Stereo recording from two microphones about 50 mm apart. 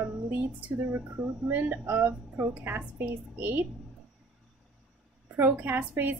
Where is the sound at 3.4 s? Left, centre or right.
Right.